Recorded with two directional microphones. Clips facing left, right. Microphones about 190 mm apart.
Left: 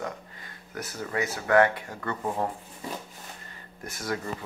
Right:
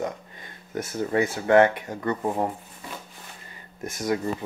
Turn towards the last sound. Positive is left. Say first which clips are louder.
# right 6 dB
turn(degrees=-20)  # may be behind; listen again after turning